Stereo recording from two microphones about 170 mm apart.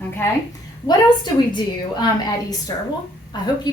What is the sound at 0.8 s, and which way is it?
A woman's voice, 25° left (ahead or behind).